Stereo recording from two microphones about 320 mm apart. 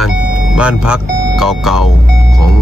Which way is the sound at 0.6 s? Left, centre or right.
Centre.